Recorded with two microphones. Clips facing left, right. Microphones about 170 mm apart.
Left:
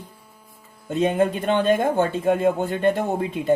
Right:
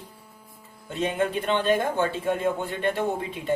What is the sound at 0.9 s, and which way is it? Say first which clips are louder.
A man's voice: left 5 dB; 45° left (ahead or behind).